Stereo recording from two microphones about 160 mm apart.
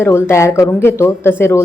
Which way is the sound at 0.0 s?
15° left (ahead or behind).